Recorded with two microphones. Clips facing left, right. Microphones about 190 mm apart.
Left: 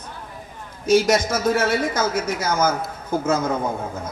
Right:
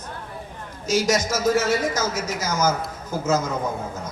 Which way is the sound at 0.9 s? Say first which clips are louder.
Left 4 dB; 60° left (ahead or behind).